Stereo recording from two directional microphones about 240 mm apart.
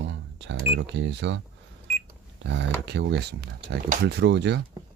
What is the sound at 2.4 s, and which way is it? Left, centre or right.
Speech, right.